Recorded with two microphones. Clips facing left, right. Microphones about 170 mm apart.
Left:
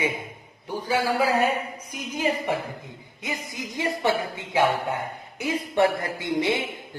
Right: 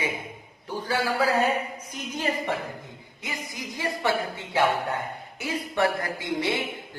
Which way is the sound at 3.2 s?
20° left (ahead or behind).